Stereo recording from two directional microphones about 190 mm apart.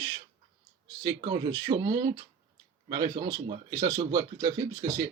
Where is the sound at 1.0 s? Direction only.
20° right (ahead or behind).